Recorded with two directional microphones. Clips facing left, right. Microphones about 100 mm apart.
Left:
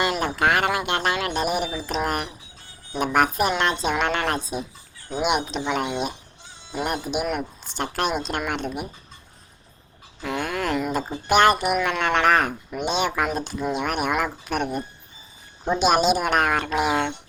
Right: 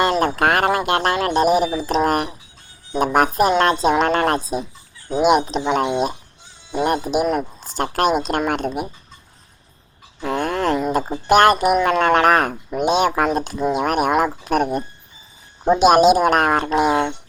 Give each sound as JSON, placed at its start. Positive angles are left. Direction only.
{"t": 0.0, "sound": "a sound", "side_deg": -45}
{"t": 0.9, "sound": "speech", "side_deg": -50}
{"t": 1.1, "sound": "a sound", "side_deg": -40}
{"t": 3.0, "sound": "speech", "side_deg": -40}
{"t": 6.8, "sound": "speech", "side_deg": -45}
{"t": 10.2, "sound": "speech", "side_deg": -40}
{"t": 10.6, "sound": "speech", "side_deg": -25}
{"t": 10.9, "sound": "speech", "side_deg": -45}